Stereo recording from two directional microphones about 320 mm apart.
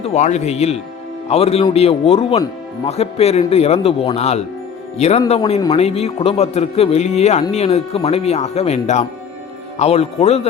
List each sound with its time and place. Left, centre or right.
0.0 s a man's voice: left